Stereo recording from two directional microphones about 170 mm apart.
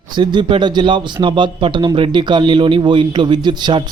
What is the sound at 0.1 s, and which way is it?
Speech, 25° right (ahead or behind).